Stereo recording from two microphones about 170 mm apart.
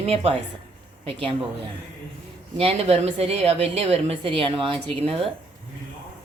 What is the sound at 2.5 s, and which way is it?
A woman's voice, 35° right (ahead or behind).